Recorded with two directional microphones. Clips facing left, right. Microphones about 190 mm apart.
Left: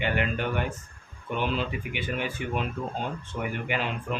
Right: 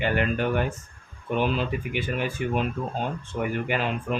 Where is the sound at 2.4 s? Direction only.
45° right (ahead or behind).